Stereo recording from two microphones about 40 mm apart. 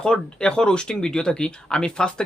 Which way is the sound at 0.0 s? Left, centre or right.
Centre.